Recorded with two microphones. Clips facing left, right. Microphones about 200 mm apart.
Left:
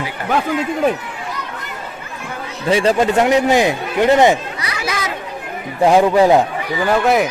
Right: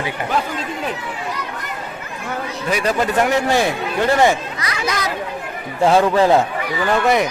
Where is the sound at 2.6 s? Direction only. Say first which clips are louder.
Left 5 dB; 25° left (ahead or behind).